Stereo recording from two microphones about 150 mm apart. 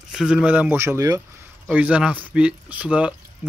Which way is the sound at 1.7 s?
10° right (ahead or behind).